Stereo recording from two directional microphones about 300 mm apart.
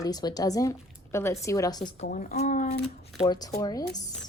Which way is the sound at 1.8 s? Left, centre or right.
Left.